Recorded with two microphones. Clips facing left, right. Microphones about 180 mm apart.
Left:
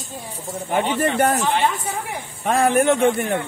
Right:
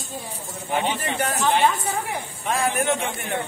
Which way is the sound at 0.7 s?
50° left (ahead or behind).